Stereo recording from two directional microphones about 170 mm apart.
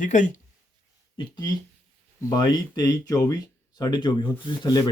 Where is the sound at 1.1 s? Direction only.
25° left (ahead or behind).